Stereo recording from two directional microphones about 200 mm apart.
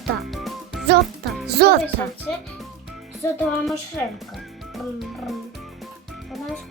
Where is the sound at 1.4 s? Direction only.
55° right (ahead or behind).